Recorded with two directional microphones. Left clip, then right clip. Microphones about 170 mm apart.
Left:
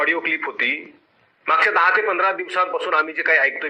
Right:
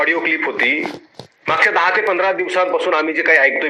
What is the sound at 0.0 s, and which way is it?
A man's voice, 35° right (ahead or behind).